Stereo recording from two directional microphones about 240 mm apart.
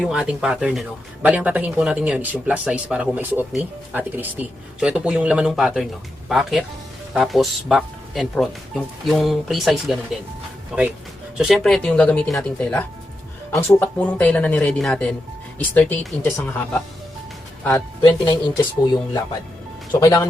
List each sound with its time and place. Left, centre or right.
0.0 s speech: centre
17.6 s speech: centre
18.0 s speech: centre